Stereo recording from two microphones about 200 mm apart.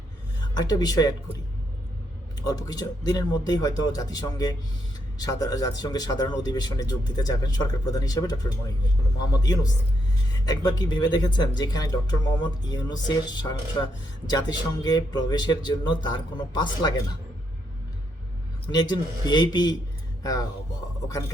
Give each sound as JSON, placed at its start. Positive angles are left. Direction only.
{"t": 0.5, "sound": "a man's voice", "side_deg": 20}
{"t": 2.4, "sound": "a man's voice", "side_deg": 20}
{"t": 9.4, "sound": "a man's voice", "side_deg": 20}
{"t": 18.7, "sound": "a man's voice", "side_deg": 20}